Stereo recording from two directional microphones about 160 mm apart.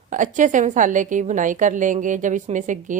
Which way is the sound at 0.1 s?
50° right (ahead or behind).